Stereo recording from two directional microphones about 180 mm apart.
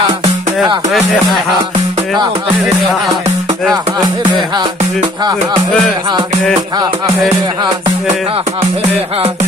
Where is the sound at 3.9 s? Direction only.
25° right (ahead or behind).